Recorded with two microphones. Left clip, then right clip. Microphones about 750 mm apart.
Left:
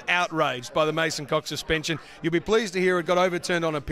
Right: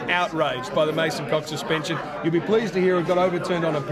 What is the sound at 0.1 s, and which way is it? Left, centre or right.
A man's voice, left.